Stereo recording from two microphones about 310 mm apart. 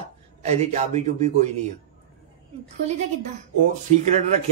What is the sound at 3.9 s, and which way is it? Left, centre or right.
Speech, right.